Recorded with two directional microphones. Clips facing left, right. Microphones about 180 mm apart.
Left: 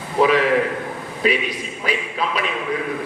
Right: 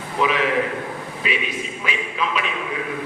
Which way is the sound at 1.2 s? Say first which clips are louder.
Left 6 dB; 40° left (ahead or behind).